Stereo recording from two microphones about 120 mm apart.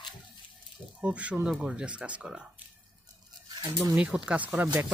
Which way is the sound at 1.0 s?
10° right (ahead or behind).